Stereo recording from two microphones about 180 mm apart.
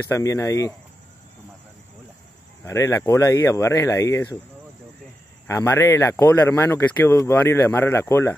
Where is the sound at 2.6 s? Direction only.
15° left (ahead or behind).